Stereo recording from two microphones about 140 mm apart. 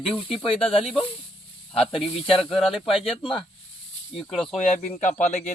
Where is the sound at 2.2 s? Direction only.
40° left (ahead or behind).